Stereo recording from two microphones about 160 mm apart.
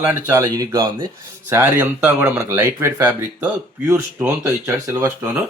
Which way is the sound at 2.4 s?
15° right (ahead or behind).